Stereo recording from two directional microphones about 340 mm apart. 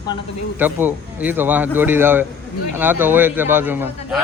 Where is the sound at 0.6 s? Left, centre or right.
Centre.